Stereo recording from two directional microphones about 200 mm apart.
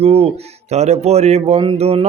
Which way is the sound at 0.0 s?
30° right (ahead or behind).